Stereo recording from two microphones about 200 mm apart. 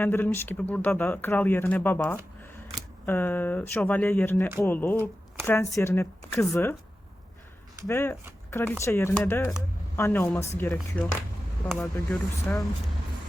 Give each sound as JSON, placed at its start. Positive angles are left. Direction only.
{"t": 0.0, "sound": "speech", "side_deg": 10}
{"t": 7.9, "sound": "speech", "side_deg": 15}